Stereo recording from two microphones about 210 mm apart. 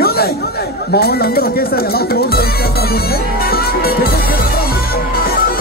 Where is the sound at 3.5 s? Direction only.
45° left (ahead or behind).